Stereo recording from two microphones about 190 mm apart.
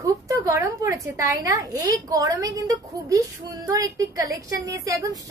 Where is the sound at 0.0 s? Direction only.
15° right (ahead or behind).